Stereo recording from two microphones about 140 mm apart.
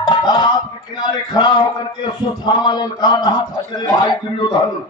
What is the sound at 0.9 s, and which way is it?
A man's voice, 30° left (ahead or behind).